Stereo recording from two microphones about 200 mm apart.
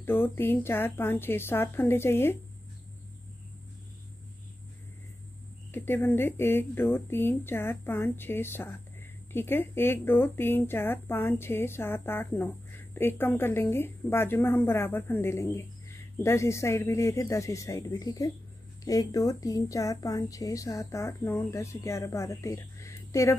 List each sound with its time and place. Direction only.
0.0 s a woman's voice: 10° left (ahead or behind)
5.7 s a woman's voice: 10° left (ahead or behind)